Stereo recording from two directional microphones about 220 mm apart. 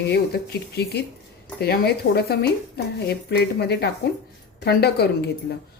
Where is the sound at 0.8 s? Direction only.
45° left (ahead or behind).